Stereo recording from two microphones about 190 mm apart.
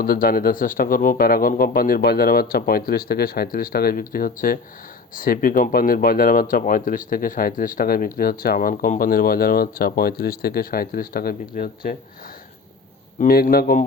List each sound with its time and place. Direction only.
0.0 s speech: 50° left (ahead or behind)
13.1 s speech: 50° left (ahead or behind)